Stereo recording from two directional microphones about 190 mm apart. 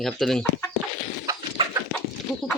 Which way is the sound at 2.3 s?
Centre (ahead or behind).